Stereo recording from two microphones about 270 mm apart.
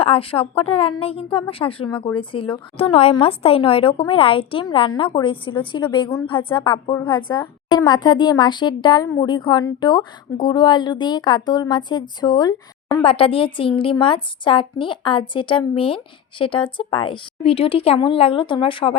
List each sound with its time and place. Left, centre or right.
0.0 s speech: left